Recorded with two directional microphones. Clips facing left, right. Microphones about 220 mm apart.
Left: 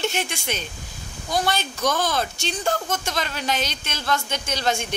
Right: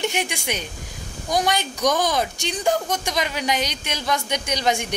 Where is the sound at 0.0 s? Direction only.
15° right (ahead or behind).